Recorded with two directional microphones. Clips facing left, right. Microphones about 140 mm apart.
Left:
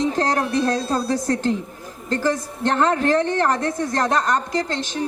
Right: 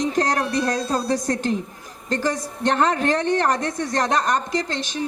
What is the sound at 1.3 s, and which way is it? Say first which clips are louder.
A woman's voice: left 2 dB; 15° right (ahead or behind).